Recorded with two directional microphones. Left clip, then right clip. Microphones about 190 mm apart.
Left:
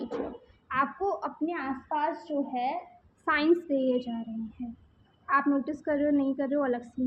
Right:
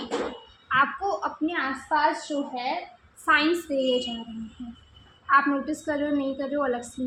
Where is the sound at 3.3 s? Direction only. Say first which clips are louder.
Right 3 dB; 35° left (ahead or behind).